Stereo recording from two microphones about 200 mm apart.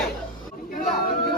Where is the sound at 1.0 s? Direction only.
45° left (ahead or behind).